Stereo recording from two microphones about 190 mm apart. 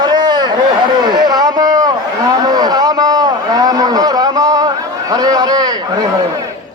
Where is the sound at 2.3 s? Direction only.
20° right (ahead or behind).